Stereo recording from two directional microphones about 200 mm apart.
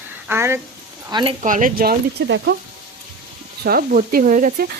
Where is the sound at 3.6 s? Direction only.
45° right (ahead or behind).